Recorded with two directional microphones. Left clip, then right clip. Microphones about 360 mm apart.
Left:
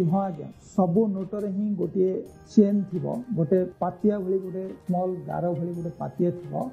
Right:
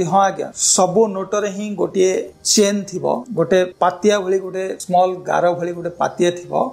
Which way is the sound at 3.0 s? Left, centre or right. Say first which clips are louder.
Right 12 dB; centre.